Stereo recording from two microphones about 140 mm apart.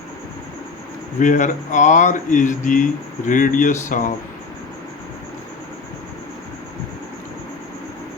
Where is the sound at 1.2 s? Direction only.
65° left (ahead or behind).